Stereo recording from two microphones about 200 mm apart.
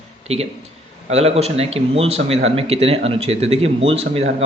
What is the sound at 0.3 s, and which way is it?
A man's voice, 30° right (ahead or behind).